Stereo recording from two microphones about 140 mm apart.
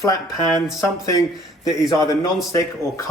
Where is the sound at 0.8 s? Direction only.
25° left (ahead or behind).